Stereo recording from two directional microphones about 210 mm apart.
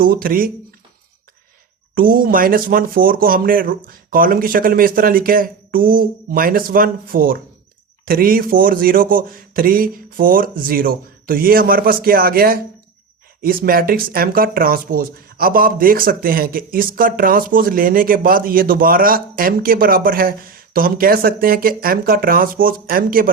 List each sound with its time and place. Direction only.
0.0 s speech: 45° right (ahead or behind)
2.0 s speech: 40° right (ahead or behind)